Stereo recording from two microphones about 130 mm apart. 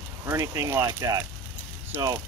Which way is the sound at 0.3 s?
25° right (ahead or behind).